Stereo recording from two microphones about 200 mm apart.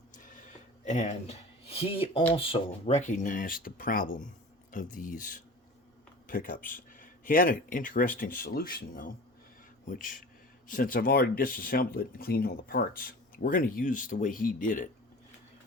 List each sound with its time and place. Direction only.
0.9 s speech: 35° left (ahead or behind)